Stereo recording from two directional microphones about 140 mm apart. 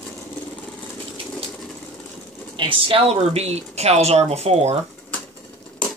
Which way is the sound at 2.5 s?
40° right (ahead or behind).